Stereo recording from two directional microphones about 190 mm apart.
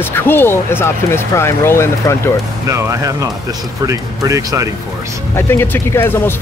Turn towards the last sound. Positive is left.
turn(degrees=10)  # may be behind; listen again after turning